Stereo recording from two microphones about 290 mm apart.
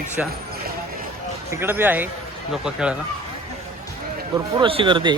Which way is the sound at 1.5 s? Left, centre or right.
Centre.